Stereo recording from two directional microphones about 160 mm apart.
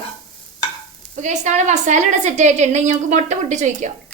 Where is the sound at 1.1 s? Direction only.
50° right (ahead or behind).